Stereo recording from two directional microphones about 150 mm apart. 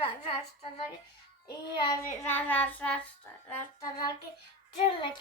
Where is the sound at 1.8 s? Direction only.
30° left (ahead or behind).